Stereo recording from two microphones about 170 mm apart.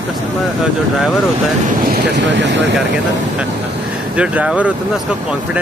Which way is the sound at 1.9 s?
90° right.